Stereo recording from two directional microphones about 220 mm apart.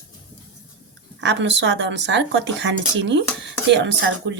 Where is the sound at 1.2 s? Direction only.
55° right (ahead or behind).